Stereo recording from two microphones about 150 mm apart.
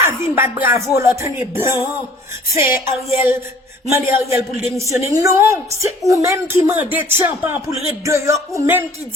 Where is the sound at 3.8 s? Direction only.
20° right (ahead or behind).